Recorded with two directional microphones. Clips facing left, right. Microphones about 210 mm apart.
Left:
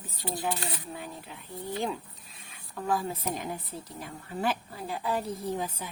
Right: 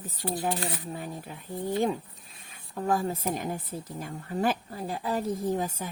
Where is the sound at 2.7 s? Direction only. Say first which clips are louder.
Right 3 dB; 45° right (ahead or behind).